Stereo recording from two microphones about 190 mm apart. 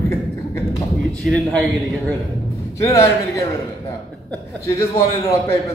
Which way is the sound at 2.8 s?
15° left (ahead or behind).